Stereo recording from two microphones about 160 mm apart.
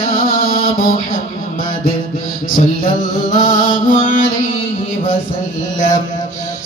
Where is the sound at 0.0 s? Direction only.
60° left (ahead or behind).